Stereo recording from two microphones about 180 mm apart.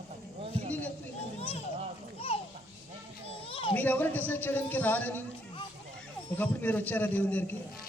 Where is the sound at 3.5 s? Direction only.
30° left (ahead or behind).